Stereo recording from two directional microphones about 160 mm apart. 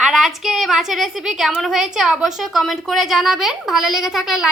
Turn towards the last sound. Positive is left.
turn(degrees=-5)  # may be behind; listen again after turning